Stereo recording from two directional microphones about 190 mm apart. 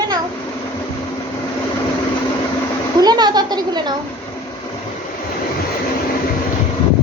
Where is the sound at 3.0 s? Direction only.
20° right (ahead or behind).